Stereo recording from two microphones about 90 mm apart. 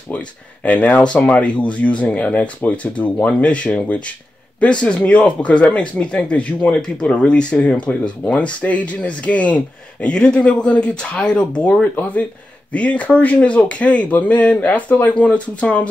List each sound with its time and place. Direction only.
0.7 s speech: 15° left (ahead or behind)